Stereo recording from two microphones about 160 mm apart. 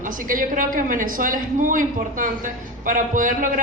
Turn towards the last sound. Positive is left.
turn(degrees=-55)  # may be behind; listen again after turning